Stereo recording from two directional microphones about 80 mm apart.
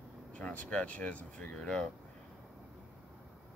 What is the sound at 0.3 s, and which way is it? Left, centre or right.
Speech, centre.